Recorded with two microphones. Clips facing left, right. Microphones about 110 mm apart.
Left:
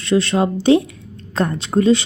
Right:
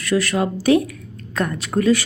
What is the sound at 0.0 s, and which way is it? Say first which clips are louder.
A woman's voice: left 3 dB; 25° left (ahead or behind).